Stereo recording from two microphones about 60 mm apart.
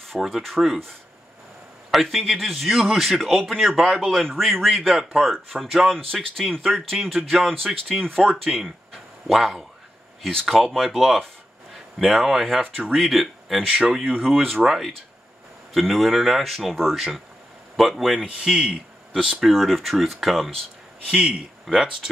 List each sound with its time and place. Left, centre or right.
0.0 s a man's voice: centre
1.9 s a man's voice: centre
13.6 s a man's voice: centre
18.2 s a man's voice: centre
19.4 s a man's voice: centre
21.1 s a man's voice: centre